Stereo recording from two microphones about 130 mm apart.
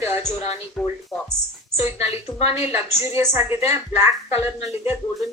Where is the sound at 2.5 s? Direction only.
15° right (ahead or behind).